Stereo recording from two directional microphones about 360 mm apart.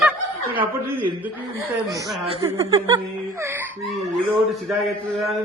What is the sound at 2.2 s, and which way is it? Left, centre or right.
Speech, centre.